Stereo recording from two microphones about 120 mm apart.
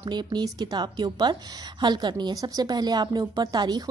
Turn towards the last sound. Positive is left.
turn(degrees=-35)  # may be behind; listen again after turning